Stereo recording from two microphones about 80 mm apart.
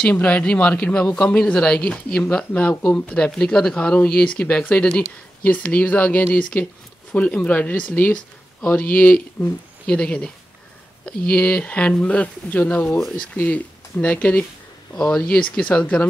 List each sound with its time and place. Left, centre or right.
0.0 s speech: centre